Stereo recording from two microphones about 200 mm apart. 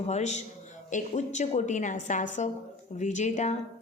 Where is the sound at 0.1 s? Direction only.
35° left (ahead or behind).